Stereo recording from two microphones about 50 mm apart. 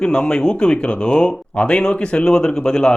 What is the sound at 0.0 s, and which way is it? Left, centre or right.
Speech, centre.